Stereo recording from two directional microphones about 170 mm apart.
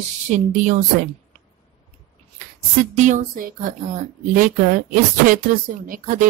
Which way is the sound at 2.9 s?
45° right (ahead or behind).